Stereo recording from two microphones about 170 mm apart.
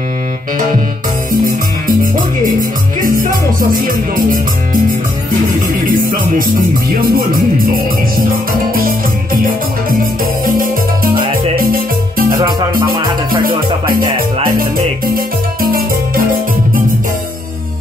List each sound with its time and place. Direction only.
1.4 s music: 55° right (ahead or behind)
5.9 s music: 55° right (ahead or behind)
8.7 s music: 55° right (ahead or behind)
11.5 s music: 60° right (ahead or behind)
12.3 s music: 25° right (ahead or behind)
14.6 s music: 60° right (ahead or behind)